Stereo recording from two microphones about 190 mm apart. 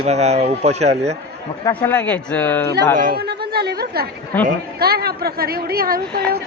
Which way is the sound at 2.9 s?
50° right (ahead or behind).